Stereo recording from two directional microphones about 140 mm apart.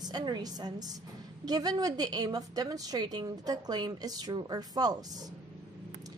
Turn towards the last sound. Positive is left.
turn(degrees=-30)  # may be behind; listen again after turning